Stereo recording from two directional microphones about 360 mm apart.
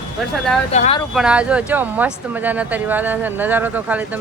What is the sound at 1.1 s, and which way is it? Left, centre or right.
Speech, centre.